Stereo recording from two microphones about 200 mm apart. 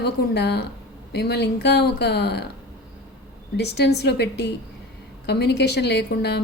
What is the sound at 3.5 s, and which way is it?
A woman's voice, 55° left (ahead or behind).